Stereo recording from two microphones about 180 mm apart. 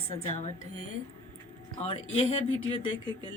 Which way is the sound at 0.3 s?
40° left (ahead or behind).